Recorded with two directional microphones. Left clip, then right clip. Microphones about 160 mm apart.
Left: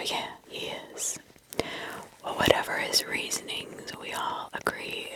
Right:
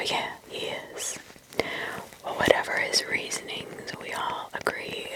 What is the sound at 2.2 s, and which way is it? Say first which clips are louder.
Whispering: right 1 dB; 35° left (ahead or behind).